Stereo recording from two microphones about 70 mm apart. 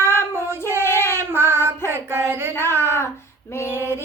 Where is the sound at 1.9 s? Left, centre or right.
Right.